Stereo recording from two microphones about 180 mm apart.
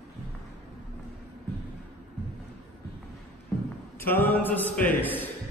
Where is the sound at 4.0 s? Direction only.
10° left (ahead or behind).